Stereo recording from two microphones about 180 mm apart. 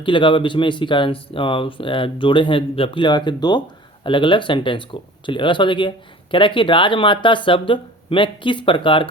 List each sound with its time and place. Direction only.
0.0 s speech: 25° left (ahead or behind)